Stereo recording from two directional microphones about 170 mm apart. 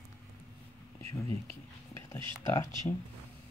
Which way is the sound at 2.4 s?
20° left (ahead or behind).